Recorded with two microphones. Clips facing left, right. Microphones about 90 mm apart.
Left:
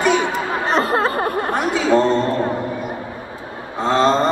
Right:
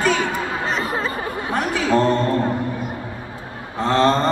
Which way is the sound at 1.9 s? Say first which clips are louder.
Left 2 dB; 20° left (ahead or behind).